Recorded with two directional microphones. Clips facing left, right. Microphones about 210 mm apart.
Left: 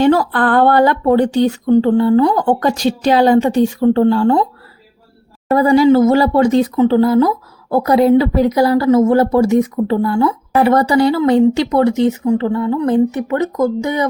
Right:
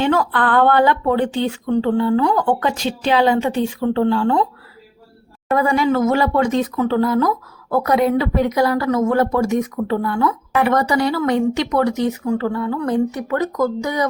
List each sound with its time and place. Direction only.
0.0 s speech: 40° left (ahead or behind)
5.5 s speech: 35° left (ahead or behind)